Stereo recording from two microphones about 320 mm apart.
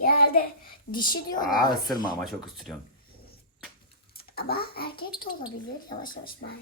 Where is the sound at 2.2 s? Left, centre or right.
Centre.